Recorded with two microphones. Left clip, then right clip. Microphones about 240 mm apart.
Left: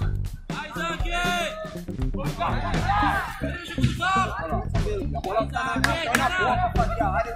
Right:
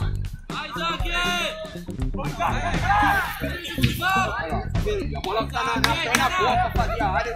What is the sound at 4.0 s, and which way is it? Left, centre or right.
Music, left.